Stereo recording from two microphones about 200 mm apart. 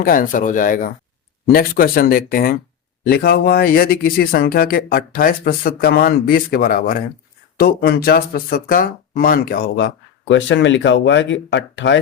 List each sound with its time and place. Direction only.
0.0 s speech: 45° left (ahead or behind); by 11.9 s 60° left (ahead or behind)